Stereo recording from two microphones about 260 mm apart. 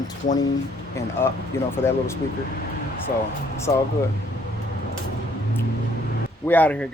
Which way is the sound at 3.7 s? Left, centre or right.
Centre.